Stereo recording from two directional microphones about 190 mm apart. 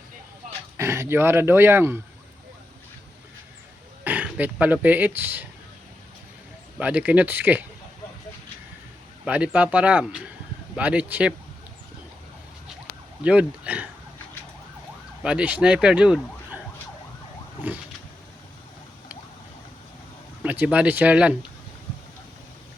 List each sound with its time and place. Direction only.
0.4 s a sound: 40° right (ahead or behind)
0.8 s speech: 15° right (ahead or behind)
4.0 s speech: 10° right (ahead or behind)
6.7 s speech: 10° right (ahead or behind)
9.2 s speech: 5° right (ahead or behind)
13.2 s speech: 5° right (ahead or behind)
15.2 s speech: 5° right (ahead or behind)
17.7 s speech: 10° right (ahead or behind)
20.4 s speech: 10° right (ahead or behind)